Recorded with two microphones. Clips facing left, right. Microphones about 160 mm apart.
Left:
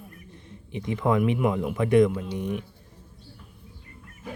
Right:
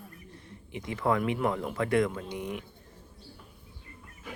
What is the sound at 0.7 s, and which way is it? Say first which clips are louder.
A man's voice: left 4 dB; 20° left (ahead or behind).